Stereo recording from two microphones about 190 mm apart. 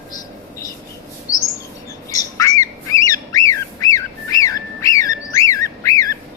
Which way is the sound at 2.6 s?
15° left (ahead or behind).